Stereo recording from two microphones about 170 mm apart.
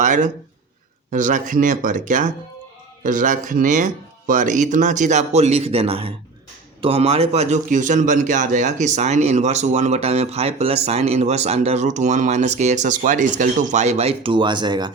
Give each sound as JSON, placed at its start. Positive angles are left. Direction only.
{"t": 0.0, "sound": "a man's voice", "side_deg": -45}